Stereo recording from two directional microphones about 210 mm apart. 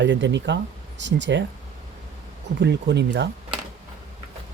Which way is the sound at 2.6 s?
55° right (ahead or behind).